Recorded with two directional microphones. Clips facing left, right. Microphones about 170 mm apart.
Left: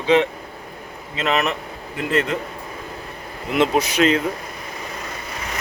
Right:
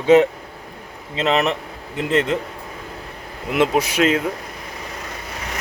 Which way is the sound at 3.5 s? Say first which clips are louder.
Even; 10° right (ahead or behind).